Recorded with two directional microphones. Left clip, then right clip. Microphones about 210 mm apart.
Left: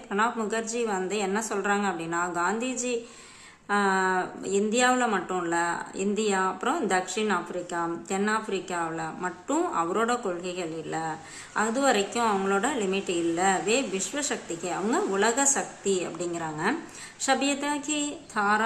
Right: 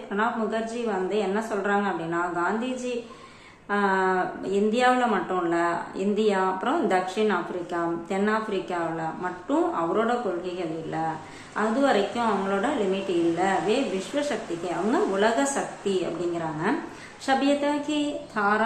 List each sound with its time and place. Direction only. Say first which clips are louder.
0.1 s speech: even; 25° left (ahead or behind)
11.5 s speech: right 1 dB; 25° left (ahead or behind)
14.8 s speech: right 2 dB; 20° left (ahead or behind)
17.2 s speech: right 3 dB; 20° left (ahead or behind)